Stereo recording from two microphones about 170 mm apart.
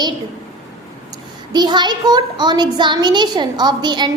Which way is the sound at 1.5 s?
25° right (ahead or behind).